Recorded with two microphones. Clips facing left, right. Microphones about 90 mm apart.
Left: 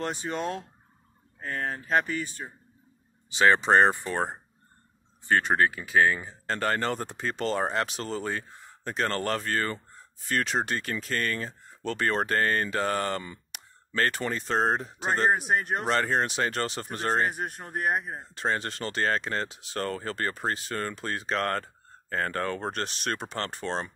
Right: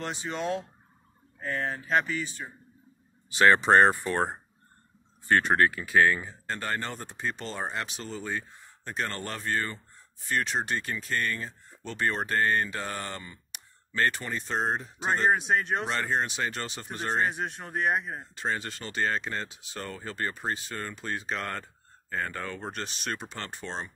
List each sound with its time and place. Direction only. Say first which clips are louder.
0.0 s speech: left 2 dB; 45° left (ahead or behind)
3.3 s speech: right 1 dB; 15° left (ahead or behind)
5.3 s speech: even; 10° left (ahead or behind)
6.4 s speech: left 8 dB; 80° left
15.1 s speech: even; 55° left (ahead or behind)